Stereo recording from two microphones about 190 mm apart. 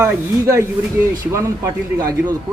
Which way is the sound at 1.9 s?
20° right (ahead or behind).